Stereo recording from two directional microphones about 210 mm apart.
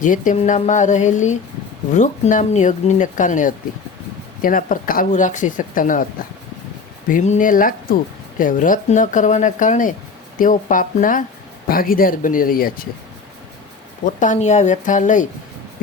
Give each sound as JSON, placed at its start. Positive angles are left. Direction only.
{"t": 0.0, "sound": "speech", "side_deg": 40}
{"t": 7.1, "sound": "speech", "side_deg": 35}
{"t": 14.0, "sound": "speech", "side_deg": 35}